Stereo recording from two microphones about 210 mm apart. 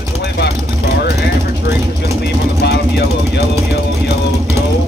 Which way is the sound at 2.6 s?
50° left (ahead or behind).